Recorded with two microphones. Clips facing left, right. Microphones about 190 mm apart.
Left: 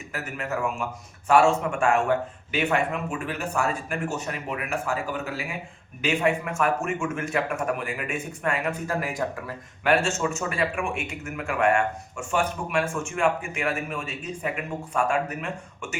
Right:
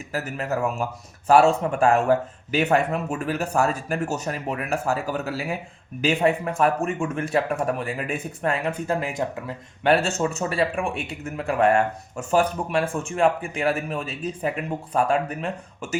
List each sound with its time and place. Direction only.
0.1 s speech: 35° right (ahead or behind); by 9.6 s 20° right (ahead or behind)
9.8 s speech: 35° right (ahead or behind)